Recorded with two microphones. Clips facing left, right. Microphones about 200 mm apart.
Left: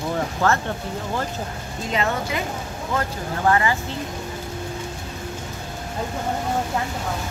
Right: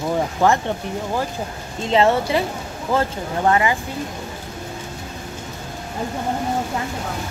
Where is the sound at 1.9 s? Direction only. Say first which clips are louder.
Right 8 dB; 30° right (ahead or behind).